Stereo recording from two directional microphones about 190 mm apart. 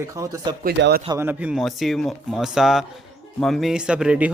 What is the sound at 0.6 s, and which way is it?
Speech, 55° right (ahead or behind).